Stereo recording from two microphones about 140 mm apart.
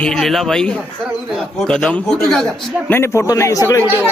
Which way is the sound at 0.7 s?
10° right (ahead or behind).